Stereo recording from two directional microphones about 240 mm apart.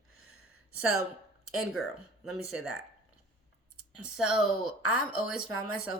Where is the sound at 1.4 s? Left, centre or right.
Left.